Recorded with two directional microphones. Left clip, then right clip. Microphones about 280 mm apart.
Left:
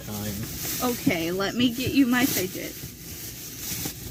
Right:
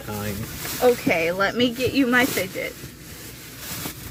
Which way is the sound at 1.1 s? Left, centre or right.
Centre.